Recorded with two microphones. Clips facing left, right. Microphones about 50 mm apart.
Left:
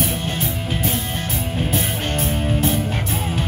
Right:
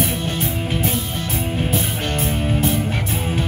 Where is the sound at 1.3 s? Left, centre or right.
Centre.